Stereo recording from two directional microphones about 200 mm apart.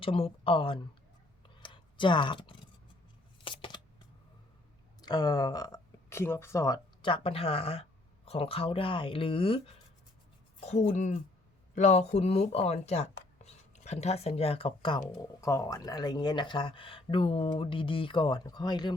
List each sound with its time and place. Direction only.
0.0 s speech: 25° left (ahead or behind)
1.5 s a sound: 25° left (ahead or behind)
5.0 s speech: 20° left (ahead or behind)